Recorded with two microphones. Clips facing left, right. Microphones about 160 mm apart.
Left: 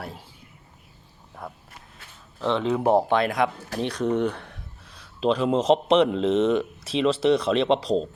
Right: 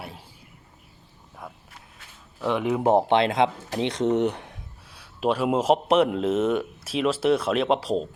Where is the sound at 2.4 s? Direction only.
15° right (ahead or behind).